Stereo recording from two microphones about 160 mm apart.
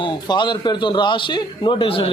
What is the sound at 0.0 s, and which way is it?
A man's voice, 30° left (ahead or behind).